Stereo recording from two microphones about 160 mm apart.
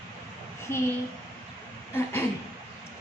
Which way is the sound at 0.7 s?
15° left (ahead or behind).